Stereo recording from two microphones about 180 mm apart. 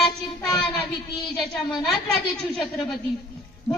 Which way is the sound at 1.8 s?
Centre (ahead or behind).